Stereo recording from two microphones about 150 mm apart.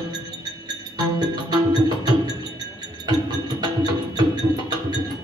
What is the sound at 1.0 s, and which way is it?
Music, 25° right (ahead or behind).